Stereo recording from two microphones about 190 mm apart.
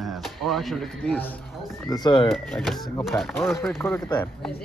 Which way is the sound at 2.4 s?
Centre (ahead or behind).